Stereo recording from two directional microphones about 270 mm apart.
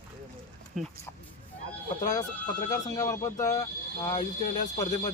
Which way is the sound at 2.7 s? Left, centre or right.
Centre.